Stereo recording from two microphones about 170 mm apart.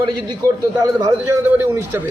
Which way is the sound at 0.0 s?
25° right (ahead or behind).